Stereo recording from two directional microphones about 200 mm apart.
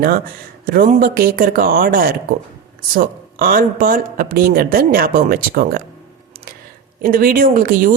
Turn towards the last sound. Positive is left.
turn(degrees=-45)  # may be behind; listen again after turning